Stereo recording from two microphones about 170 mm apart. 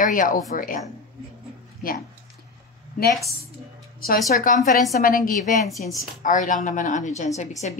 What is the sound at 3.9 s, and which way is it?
A woman's voice, 60° left (ahead or behind).